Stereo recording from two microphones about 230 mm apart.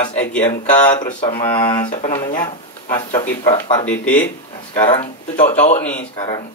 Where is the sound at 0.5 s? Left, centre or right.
Left.